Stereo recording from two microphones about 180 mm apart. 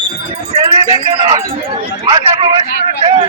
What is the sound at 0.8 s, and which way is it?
A man's voice, 25° right (ahead or behind).